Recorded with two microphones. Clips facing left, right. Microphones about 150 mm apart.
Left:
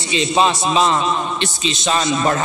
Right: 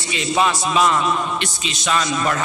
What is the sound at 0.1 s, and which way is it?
A man's voice, 25° left (ahead or behind).